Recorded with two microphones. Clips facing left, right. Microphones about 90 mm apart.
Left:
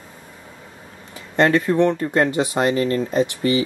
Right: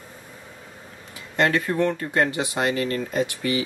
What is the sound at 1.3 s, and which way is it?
Speech, 30° left (ahead or behind).